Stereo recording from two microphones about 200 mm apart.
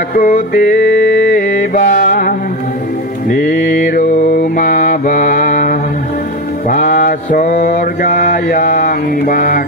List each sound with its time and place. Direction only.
0.1 s mantra: 45° left (ahead or behind)